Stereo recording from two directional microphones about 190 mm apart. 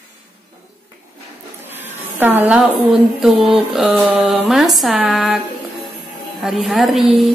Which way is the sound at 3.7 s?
Centre (ahead or behind).